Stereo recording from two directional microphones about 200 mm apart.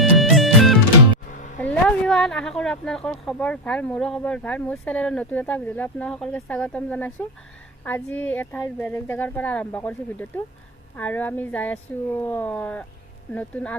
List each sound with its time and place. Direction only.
0.0 s music: centre (ahead or behind)
1.3 s music: 40° left (ahead or behind)
1.9 s speech: 5° left (ahead or behind)